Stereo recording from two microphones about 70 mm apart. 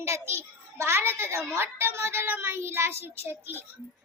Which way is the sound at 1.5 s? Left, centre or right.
Right.